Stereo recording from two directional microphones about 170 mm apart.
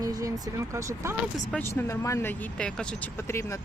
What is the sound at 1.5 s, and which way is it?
Speech, 15° left (ahead or behind).